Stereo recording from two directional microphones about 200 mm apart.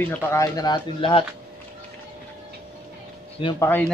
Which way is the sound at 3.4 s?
25° left (ahead or behind).